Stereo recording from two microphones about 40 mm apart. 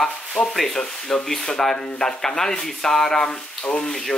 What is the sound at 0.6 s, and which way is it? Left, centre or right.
Speech, centre.